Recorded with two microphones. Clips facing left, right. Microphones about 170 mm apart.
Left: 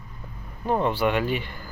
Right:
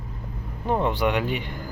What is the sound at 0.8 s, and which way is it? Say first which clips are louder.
Speech: even; 15° right (ahead or behind).